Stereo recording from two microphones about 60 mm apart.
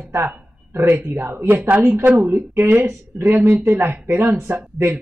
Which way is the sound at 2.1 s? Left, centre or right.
Right.